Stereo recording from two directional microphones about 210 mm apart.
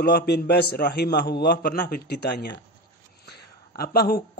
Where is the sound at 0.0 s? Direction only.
45° left (ahead or behind).